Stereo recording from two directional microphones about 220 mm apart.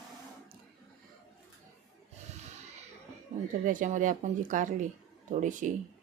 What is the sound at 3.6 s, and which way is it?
Speech, 35° right (ahead or behind).